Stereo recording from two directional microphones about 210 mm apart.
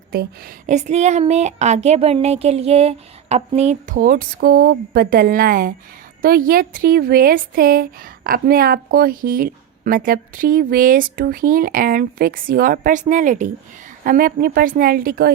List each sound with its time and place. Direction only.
0.1 s speech: 45° right (ahead or behind)